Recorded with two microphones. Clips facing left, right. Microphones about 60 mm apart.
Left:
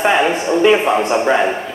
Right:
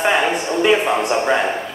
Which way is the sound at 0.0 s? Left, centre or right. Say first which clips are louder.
Left 3 dB; centre.